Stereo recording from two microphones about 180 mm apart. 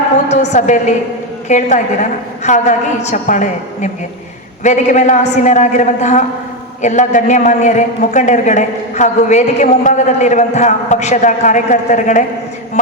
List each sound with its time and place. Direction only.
0.3 s a man's voice: 40° left (ahead or behind)